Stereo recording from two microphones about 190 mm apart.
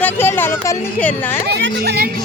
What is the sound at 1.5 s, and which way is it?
Speech, 60° right (ahead or behind).